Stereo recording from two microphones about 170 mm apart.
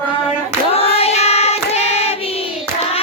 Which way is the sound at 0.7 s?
35° left (ahead or behind).